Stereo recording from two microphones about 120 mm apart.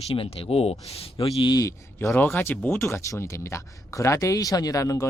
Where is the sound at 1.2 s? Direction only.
45° left (ahead or behind).